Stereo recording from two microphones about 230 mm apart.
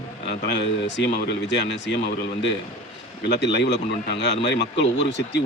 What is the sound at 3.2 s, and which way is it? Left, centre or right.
Speech, left.